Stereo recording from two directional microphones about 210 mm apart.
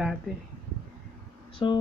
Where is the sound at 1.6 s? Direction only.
20° left (ahead or behind).